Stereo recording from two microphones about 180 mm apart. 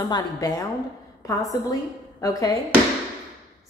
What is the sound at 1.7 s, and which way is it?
Speech, 20° left (ahead or behind).